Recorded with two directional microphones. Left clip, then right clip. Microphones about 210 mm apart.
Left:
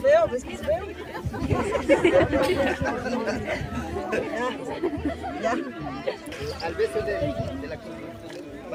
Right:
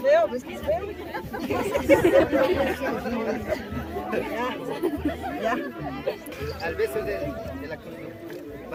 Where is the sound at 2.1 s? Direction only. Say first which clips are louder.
Right 1 dB; 50° right (ahead or behind).